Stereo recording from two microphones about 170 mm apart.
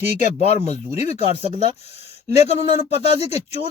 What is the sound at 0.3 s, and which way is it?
Speech, 40° left (ahead or behind).